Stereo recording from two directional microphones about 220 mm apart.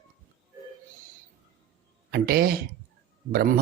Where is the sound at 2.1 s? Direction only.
45° right (ahead or behind).